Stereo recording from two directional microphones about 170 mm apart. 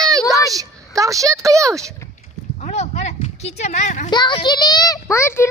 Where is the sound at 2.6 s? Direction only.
40° left (ahead or behind).